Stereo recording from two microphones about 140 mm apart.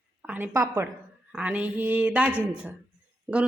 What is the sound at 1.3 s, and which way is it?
A woman's voice, 10° right (ahead or behind).